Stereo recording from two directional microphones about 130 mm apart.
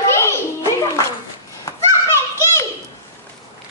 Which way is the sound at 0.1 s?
20° left (ahead or behind).